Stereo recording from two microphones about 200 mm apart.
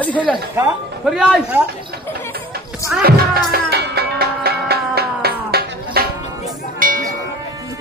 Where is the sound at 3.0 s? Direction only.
50° right (ahead or behind).